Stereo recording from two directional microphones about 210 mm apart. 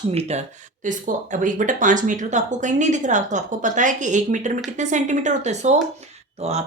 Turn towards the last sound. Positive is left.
turn(degrees=-30)  # may be behind; listen again after turning